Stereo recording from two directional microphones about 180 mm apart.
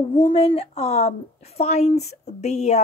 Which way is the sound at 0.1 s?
30° left (ahead or behind).